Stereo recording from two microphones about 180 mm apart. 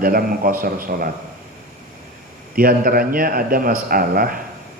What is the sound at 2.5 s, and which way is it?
A man's voice, 55° right (ahead or behind).